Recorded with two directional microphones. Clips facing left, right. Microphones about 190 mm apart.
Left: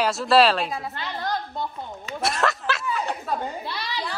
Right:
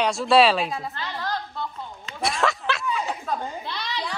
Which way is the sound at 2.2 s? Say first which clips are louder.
Even; centre (ahead or behind).